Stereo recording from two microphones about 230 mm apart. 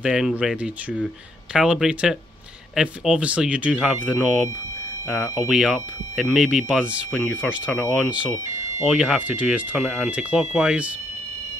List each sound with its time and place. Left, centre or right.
0.0 s speech: centre